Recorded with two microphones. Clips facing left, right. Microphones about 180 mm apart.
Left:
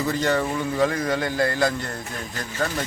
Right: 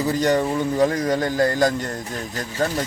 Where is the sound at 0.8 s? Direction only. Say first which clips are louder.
Right 2 dB; 40° right (ahead or behind).